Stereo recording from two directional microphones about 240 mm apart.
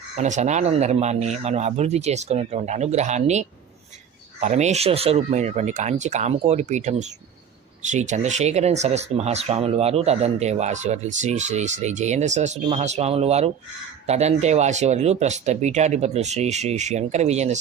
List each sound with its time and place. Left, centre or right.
0.2 s speech: right